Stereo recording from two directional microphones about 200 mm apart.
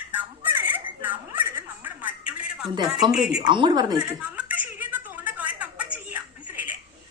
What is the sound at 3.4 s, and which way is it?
Speech, 20° right (ahead or behind).